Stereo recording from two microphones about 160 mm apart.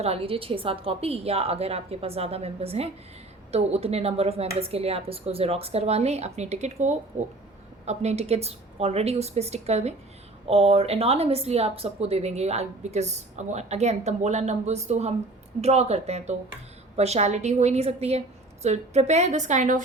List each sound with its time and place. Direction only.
0.0 s a woman's voice: 35° right (ahead or behind); by 19.8 s 50° right (ahead or behind)